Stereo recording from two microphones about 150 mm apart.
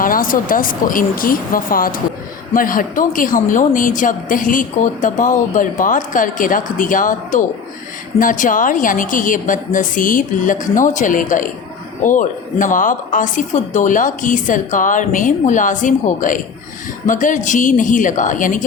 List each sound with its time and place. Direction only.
0.0 s speech: 70° left (ahead or behind)